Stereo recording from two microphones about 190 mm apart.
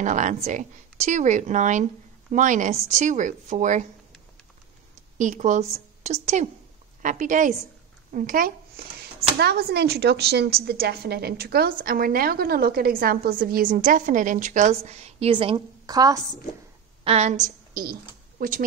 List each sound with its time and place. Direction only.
0.0 s a woman's voice: 40° right (ahead or behind)
5.2 s a woman's voice: 40° right (ahead or behind); by 16.2 s 20° right (ahead or behind)
17.0 s a woman's voice: 35° right (ahead or behind)